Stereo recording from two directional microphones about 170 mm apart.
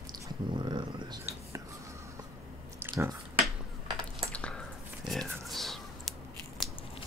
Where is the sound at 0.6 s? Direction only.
25° right (ahead or behind).